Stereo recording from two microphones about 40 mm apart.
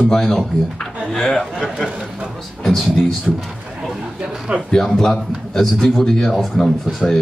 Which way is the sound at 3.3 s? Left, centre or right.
Centre.